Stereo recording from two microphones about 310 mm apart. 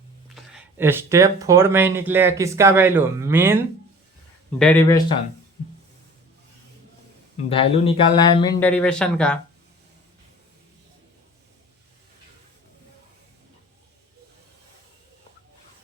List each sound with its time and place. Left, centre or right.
0.5 s speech: centre
4.5 s speech: centre
5.6 s a sound: left
7.5 s speech: centre